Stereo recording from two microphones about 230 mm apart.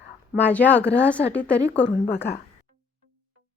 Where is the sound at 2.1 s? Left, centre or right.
Left.